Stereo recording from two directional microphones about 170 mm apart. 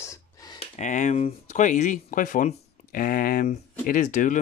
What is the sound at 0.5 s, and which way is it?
Speech, 45° left (ahead or behind).